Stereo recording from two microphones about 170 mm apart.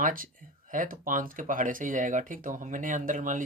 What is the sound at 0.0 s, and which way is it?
Speech, 55° right (ahead or behind).